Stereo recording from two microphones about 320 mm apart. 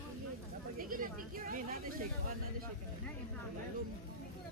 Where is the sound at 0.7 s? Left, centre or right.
Right.